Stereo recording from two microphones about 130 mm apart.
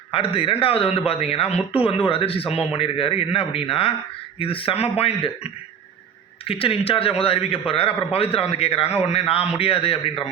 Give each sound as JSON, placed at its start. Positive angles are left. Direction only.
{"t": 0.3, "sound": "a man's voice", "side_deg": 45}
{"t": 6.5, "sound": "a man's voice", "side_deg": 45}